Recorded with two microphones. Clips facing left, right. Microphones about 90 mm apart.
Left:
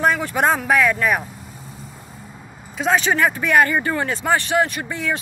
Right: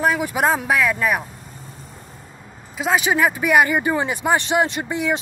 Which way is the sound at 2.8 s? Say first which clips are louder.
Even; 5° right (ahead or behind).